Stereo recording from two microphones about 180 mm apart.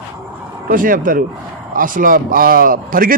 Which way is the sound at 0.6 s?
50° right (ahead or behind).